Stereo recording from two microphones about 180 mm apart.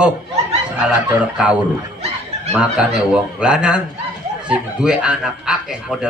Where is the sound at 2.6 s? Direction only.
5° right (ahead or behind).